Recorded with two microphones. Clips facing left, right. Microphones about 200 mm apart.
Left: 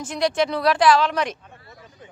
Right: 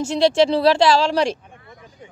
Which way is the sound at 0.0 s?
25° right (ahead or behind).